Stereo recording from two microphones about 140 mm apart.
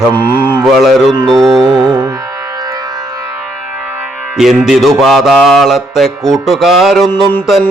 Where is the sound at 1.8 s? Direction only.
30° right (ahead or behind).